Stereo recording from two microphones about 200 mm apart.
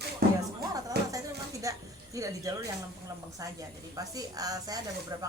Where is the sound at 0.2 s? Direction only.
50° right (ahead or behind).